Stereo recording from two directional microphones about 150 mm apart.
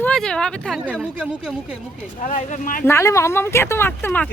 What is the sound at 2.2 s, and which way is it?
Speech, 55° left (ahead or behind).